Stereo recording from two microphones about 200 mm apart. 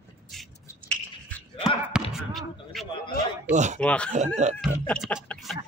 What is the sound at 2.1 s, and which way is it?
Basketball bounce, centre (ahead or behind).